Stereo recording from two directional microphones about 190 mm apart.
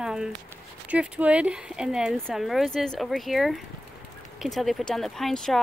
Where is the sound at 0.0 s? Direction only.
5° right (ahead or behind).